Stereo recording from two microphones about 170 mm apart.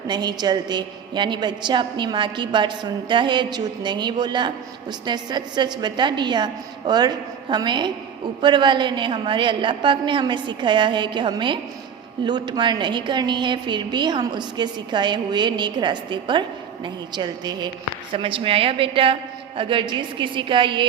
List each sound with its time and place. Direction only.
0.1 s a woman's voice: 25° right (ahead or behind)